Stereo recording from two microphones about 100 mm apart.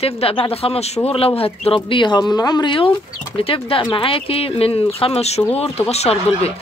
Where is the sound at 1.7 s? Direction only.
55° left (ahead or behind).